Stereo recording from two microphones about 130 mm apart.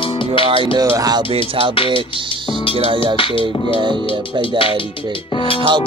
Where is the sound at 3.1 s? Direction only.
40° left (ahead or behind).